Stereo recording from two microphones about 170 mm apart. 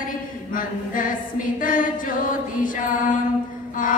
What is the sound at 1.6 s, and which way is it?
A capella, 50° left (ahead or behind).